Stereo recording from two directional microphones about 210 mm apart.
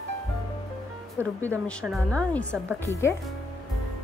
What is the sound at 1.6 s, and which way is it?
Speech, centre (ahead or behind).